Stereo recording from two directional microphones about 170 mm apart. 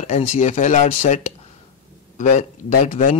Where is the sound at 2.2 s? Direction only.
45° left (ahead or behind).